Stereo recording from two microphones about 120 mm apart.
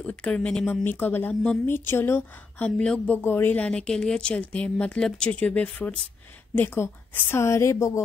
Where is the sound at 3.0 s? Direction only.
15° left (ahead or behind).